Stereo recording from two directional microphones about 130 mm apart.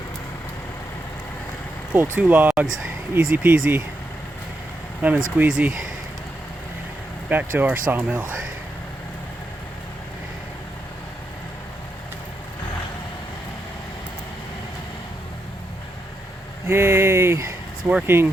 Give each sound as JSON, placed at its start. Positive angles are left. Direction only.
{"t": 1.9, "sound": "speech", "side_deg": -15}
{"t": 5.4, "sound": "speech", "side_deg": -10}
{"t": 7.3, "sound": "speech", "side_deg": -15}
{"t": 16.6, "sound": "speech", "side_deg": -20}